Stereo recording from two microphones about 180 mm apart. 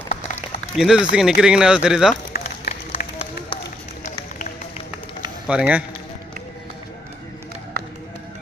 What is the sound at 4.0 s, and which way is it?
Music, 45° left (ahead or behind).